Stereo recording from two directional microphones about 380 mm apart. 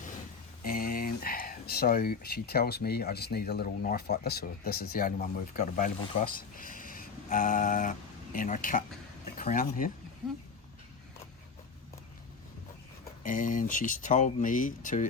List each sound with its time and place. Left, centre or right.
0.6 s speech: left
13.2 s speech: left